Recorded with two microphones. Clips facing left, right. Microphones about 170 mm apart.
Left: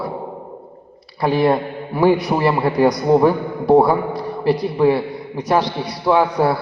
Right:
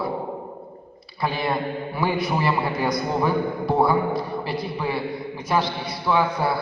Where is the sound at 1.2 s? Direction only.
40° left (ahead or behind).